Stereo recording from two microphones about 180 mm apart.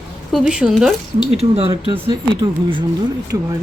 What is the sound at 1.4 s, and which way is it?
Speech, 35° right (ahead or behind).